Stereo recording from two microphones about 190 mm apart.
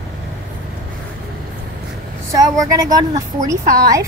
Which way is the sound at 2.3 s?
15° right (ahead or behind).